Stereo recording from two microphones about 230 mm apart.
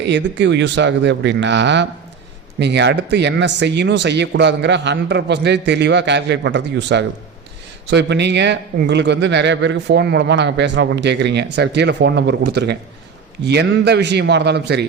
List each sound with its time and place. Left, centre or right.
0.0 s speech: right